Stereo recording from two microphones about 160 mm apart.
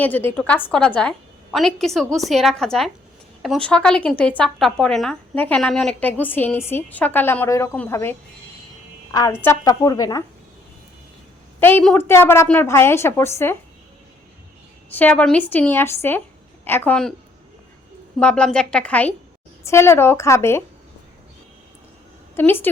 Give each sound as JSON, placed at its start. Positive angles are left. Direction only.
{"t": 0.0, "sound": "a woman's voice", "side_deg": 10}
{"t": 9.4, "sound": "a woman's voice", "side_deg": 20}
{"t": 11.6, "sound": "a woman's voice", "side_deg": 10}
{"t": 14.8, "sound": "a woman's voice", "side_deg": 10}
{"t": 18.2, "sound": "a woman's voice", "side_deg": 5}
{"t": 22.4, "sound": "a woman's voice", "side_deg": 15}